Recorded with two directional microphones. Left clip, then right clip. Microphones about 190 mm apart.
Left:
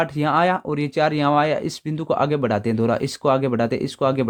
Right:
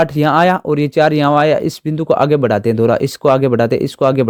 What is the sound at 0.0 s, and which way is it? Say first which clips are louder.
Speech: right 7 dB; 40° right (ahead or behind).